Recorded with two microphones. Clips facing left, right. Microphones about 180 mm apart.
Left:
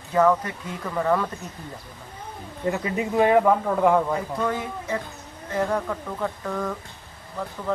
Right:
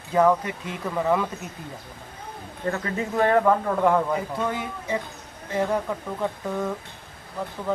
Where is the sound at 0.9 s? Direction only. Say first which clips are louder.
Even; 5° right (ahead or behind).